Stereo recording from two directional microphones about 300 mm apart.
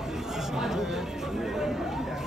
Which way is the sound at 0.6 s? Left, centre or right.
Centre.